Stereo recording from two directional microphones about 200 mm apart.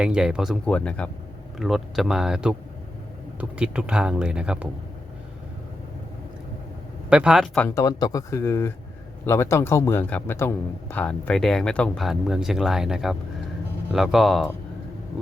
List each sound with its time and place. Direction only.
0.0 s speech: 5° right (ahead or behind)
7.1 s speech: 5° right (ahead or behind)
7.7 s speech: 15° left (ahead or behind); by 14.5 s centre (ahead or behind)